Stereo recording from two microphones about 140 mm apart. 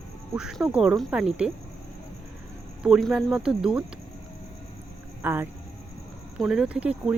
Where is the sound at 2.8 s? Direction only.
5° right (ahead or behind).